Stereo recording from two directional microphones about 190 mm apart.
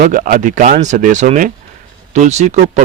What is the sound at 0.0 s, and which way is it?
Speech, 45° right (ahead or behind).